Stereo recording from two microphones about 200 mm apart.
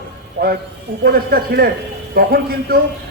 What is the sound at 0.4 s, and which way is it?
A man's voice, 55° right (ahead or behind).